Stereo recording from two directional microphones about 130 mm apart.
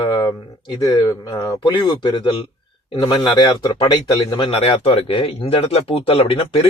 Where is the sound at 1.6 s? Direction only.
40° left (ahead or behind).